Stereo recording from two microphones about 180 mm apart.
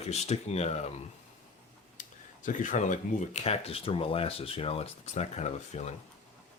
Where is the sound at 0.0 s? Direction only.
35° left (ahead or behind).